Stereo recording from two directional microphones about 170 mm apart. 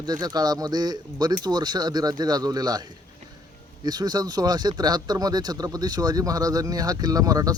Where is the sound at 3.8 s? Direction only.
25° right (ahead or behind).